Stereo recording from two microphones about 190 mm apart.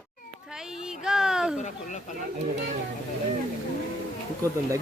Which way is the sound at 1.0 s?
5° right (ahead or behind).